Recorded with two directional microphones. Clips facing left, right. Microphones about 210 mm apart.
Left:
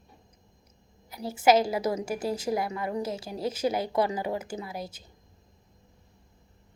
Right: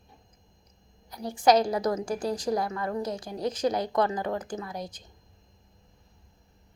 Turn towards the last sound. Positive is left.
turn(degrees=5)  # may be behind; listen again after turning